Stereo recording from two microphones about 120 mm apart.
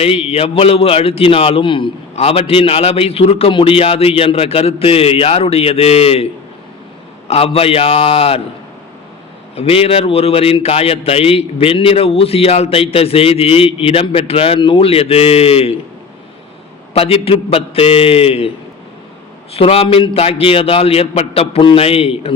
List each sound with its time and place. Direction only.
0.3 s a man's voice: 55° left (ahead or behind)
7.3 s a man's voice: 55° left (ahead or behind)
9.6 s a man's voice: 55° left (ahead or behind)
16.9 s a man's voice: 55° left (ahead or behind)
19.5 s a man's voice: 55° left (ahead or behind)